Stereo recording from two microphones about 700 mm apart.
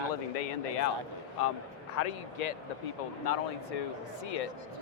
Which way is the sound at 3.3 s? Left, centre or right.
Left.